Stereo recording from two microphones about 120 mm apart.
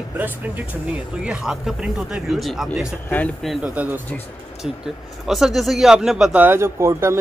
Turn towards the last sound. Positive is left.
turn(degrees=-25)  # may be behind; listen again after turning